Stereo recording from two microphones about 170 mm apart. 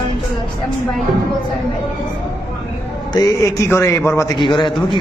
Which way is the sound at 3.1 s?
20° left (ahead or behind).